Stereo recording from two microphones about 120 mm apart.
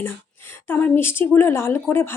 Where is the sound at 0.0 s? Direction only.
20° left (ahead or behind).